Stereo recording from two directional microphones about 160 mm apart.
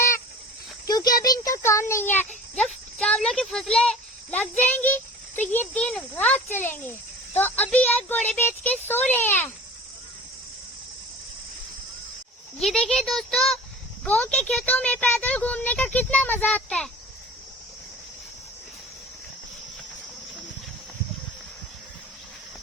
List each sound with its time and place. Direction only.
0.9 s a sound: 25° left (ahead or behind)
3.0 s a child's voice: 5° left (ahead or behind)
12.5 s speech: 5° left (ahead or behind)